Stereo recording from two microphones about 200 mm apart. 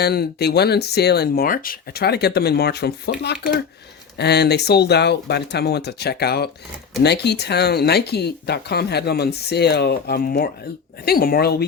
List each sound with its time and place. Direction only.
0.0 s speech: 55° left (ahead or behind)